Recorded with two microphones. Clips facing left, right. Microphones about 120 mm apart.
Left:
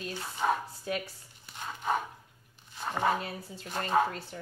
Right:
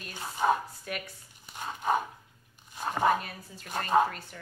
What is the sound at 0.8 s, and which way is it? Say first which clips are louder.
Speech: left 4 dB; 30° left (ahead or behind).